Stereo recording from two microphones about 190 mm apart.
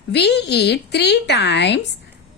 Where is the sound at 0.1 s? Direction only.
65° left (ahead or behind).